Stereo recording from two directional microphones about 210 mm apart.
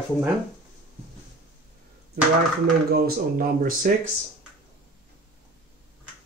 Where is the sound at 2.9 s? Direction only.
45° right (ahead or behind).